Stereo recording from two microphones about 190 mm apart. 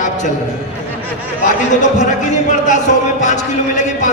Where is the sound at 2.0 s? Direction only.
40° left (ahead or behind).